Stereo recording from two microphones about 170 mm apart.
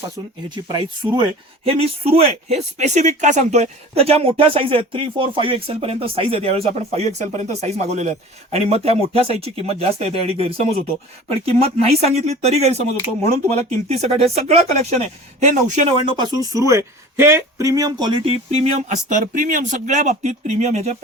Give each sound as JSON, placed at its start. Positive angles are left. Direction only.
{"t": 0.5, "sound": "speech", "side_deg": -25}
{"t": 16.0, "sound": "speech", "side_deg": -25}